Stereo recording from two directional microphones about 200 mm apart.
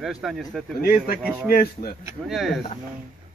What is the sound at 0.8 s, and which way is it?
Speech, 50° left (ahead or behind).